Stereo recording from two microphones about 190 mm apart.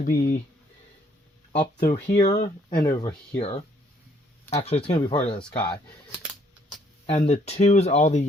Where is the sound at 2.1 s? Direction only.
40° left (ahead or behind).